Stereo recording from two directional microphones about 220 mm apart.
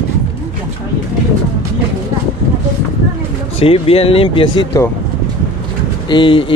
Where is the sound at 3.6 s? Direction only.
25° left (ahead or behind).